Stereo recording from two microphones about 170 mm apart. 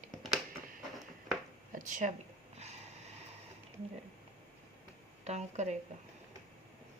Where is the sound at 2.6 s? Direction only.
40° right (ahead or behind).